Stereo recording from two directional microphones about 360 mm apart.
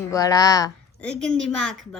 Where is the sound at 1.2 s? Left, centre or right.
Right.